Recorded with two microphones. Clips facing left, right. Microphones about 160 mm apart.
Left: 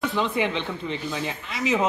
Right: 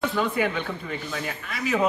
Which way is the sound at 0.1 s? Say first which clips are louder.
Even; 20° left (ahead or behind).